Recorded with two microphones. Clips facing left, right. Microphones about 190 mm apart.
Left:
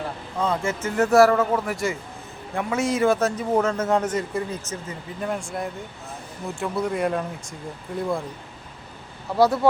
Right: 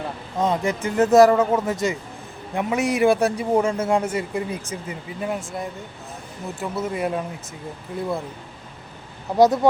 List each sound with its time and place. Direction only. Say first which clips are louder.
0.3 s a man's voice: right 3 dB; 20° right (ahead or behind)
9.3 s speech: right 3 dB; 20° right (ahead or behind)